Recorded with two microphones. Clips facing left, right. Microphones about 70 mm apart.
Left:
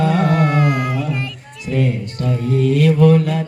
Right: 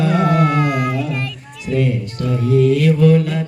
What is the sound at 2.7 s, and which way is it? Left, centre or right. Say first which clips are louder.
Mantra: even; left.